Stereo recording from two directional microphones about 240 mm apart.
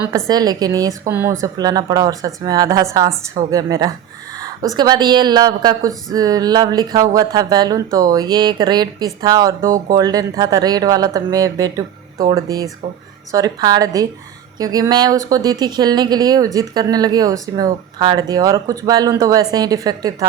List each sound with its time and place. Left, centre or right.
0.3 s speech: centre